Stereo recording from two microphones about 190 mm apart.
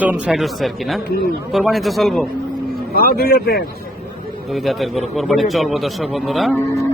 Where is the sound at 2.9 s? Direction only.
55° left (ahead or behind).